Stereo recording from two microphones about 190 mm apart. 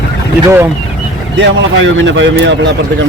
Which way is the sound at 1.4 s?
75° right (ahead or behind).